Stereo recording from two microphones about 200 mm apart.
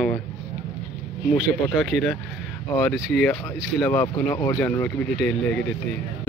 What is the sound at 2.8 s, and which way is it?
Speech, 5° left (ahead or behind).